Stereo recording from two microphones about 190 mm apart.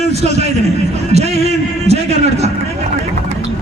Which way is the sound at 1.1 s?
35° right (ahead or behind).